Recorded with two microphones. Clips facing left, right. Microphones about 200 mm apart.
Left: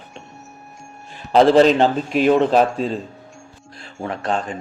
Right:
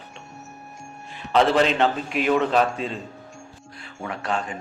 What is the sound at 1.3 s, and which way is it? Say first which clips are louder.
Speech: left 7 dB; 35° left (ahead or behind).